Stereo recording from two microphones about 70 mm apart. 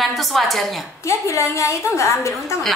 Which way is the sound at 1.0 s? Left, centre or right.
Left.